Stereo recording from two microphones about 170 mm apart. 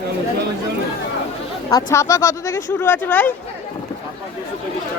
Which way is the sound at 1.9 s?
15° left (ahead or behind).